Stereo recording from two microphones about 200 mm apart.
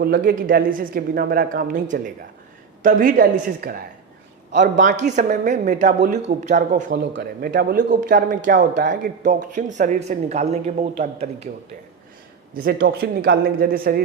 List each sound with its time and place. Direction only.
0.0 s a woman's voice: 50° right (ahead or behind)
6.9 s speech: 55° right (ahead or behind); by 11.3 s 35° right (ahead or behind)
12.6 s a woman's voice: 50° right (ahead or behind)